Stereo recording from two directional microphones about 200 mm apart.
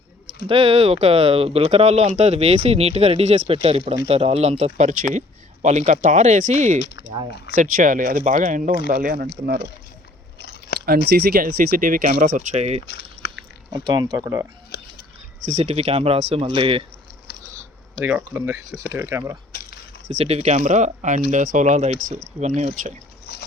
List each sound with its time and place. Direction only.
0.4 s speech: 30° right (ahead or behind)
7.1 s speech: 25° right (ahead or behind)
7.5 s speech: 40° right (ahead or behind)
10.4 s chewing: 50° left (ahead or behind)
10.8 s speech: 50° right (ahead or behind); by 12.8 s 35° right (ahead or behind)
12.9 s a sound: 50° left (ahead or behind)
13.7 s speech: 20° right (ahead or behind)
14.7 s a sound: 50° left (ahead or behind)
15.4 s speech: 35° right (ahead or behind)
18.0 s speech: 10° right (ahead or behind)
20.1 s speech: 30° right (ahead or behind)